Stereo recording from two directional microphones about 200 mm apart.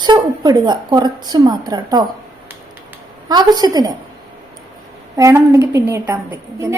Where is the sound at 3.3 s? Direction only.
20° right (ahead or behind).